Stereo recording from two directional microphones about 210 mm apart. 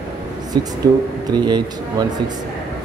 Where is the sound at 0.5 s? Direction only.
20° right (ahead or behind).